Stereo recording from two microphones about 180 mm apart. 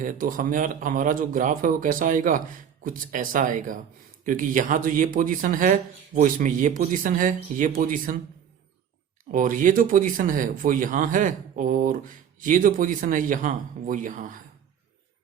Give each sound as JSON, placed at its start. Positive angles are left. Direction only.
{"t": 0.0, "sound": "speech", "side_deg": -50}
{"t": 9.3, "sound": "speech", "side_deg": -50}